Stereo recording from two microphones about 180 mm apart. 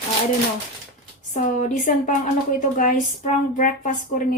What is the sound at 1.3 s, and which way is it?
A woman's voice, 45° left (ahead or behind).